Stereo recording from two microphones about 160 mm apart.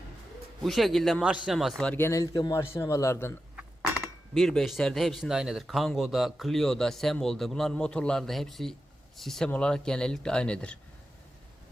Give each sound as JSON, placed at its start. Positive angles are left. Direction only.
{"t": 0.6, "sound": "a man's voice", "side_deg": 0}
{"t": 4.4, "sound": "speech", "side_deg": 0}